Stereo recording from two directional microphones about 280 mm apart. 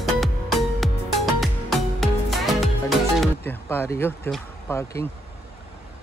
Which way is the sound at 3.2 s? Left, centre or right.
Centre.